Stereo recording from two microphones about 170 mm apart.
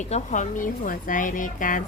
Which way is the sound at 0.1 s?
45° left (ahead or behind).